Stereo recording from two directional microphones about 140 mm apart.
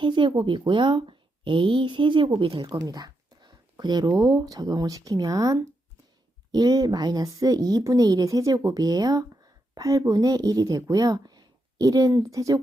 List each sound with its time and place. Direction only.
0.0 s a woman's voice: 35° right (ahead or behind)